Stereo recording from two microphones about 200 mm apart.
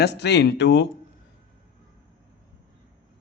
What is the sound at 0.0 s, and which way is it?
Speech, 55° left (ahead or behind).